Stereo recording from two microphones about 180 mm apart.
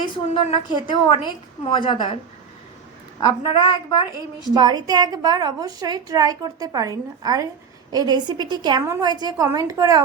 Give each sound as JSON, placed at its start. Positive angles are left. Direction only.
{"t": 0.0, "sound": "a woman's voice", "side_deg": 25}
{"t": 3.2, "sound": "a woman's voice", "side_deg": 20}
{"t": 4.5, "sound": "a woman's voice", "side_deg": -20}